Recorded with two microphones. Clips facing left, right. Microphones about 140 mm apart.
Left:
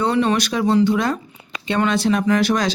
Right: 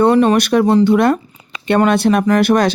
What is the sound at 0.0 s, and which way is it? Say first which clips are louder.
Speech: right 7 dB; 50° right (ahead or behind).